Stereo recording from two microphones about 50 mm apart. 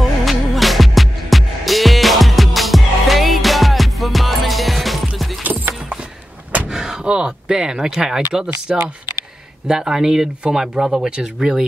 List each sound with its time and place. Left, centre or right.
0.0 s music: centre
5.4 s clip-clop: right
6.7 s door: centre
7.1 s speech: centre